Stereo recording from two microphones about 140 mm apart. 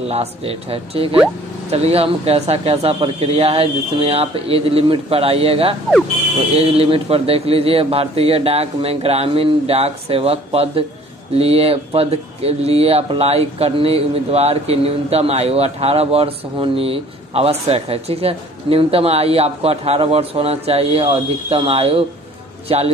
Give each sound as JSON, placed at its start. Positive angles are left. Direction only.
{"t": 0.1, "sound": "speech", "side_deg": -45}